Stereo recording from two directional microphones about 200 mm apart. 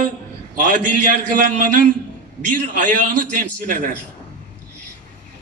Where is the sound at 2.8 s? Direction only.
40° right (ahead or behind).